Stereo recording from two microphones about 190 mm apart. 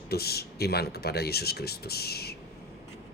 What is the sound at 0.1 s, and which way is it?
Speech, 55° left (ahead or behind).